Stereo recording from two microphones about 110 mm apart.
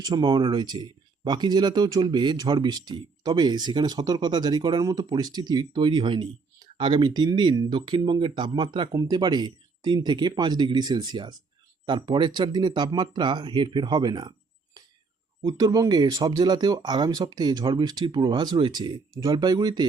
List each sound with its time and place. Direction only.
0.0 s speech: 40° right (ahead or behind)
8.9 s speech: 35° right (ahead or behind)